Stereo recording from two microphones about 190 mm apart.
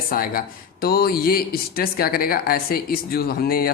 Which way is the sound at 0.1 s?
50° left (ahead or behind).